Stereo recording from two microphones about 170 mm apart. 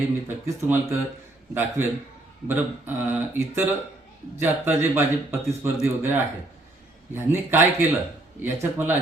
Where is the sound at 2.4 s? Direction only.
10° right (ahead or behind).